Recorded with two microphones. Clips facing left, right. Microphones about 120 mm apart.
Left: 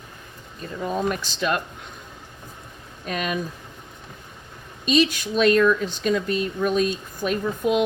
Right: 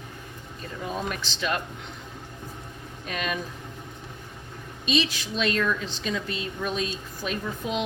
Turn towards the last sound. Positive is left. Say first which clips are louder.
# left 8 dB
turn(degrees=55)  # may be behind; listen again after turning